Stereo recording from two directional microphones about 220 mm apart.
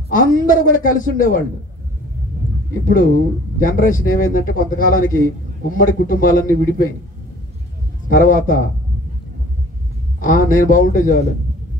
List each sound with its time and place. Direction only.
0.1 s speech: 40° left (ahead or behind)
2.9 s speech: 40° left (ahead or behind)
8.1 s speech: 40° left (ahead or behind)
10.2 s speech: 40° left (ahead or behind)